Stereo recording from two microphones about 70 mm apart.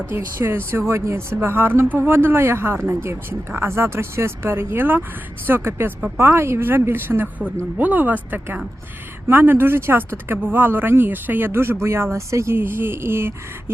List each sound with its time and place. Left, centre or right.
0.1 s speech: right